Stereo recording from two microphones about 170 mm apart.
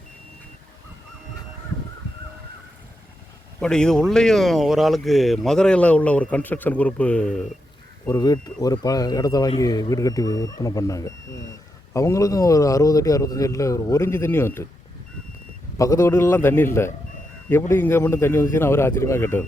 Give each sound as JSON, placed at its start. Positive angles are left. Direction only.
{"t": 3.6, "sound": "speech", "side_deg": 5}
{"t": 8.0, "sound": "a man's voice", "side_deg": 20}
{"t": 15.8, "sound": "a man's voice", "side_deg": 15}